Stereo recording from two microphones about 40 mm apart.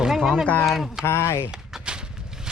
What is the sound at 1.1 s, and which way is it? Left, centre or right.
Speech, left.